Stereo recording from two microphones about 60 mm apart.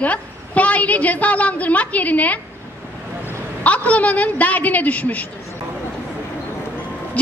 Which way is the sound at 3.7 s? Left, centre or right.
Left.